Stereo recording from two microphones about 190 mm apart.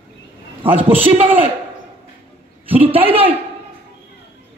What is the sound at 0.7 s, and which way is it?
Speech, 10° right (ahead or behind).